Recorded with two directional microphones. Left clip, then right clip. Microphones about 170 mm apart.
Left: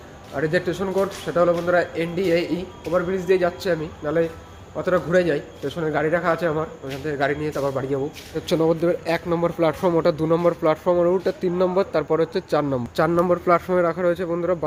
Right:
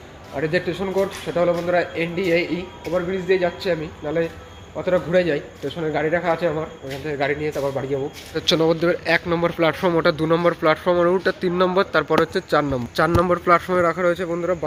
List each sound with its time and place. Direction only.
0.3 s a man's voice: 10° left (ahead or behind)